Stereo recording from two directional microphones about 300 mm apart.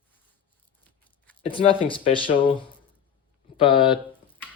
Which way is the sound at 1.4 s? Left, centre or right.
Centre.